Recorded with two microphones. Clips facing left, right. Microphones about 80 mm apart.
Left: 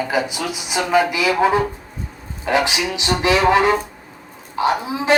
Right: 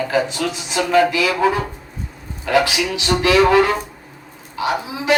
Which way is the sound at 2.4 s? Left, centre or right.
Left.